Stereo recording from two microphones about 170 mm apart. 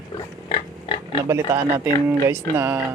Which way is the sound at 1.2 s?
15° right (ahead or behind).